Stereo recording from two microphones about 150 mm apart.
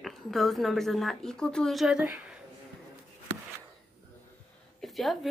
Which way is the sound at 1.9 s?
10° right (ahead or behind).